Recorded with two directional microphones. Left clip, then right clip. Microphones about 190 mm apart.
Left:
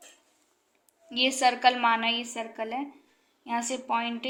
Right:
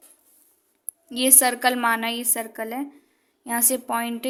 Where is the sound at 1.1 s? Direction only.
70° right (ahead or behind).